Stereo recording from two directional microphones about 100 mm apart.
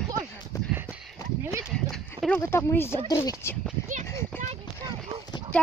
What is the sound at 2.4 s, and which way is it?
Speech, 25° left (ahead or behind).